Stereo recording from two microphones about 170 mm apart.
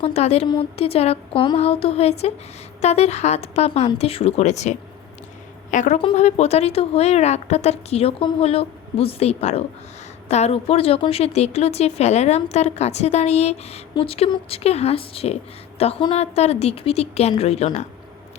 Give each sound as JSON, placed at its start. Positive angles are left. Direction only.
{"t": 0.0, "sound": "a woman's voice", "side_deg": 40}
{"t": 5.7, "sound": "a woman's voice", "side_deg": 45}
{"t": 6.0, "sound": "a woman's voice", "side_deg": 35}